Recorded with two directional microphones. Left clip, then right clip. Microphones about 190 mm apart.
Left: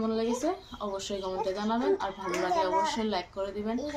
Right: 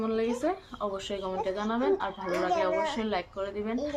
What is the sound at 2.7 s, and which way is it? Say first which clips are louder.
Speech: left 1 dB; 25° right (ahead or behind).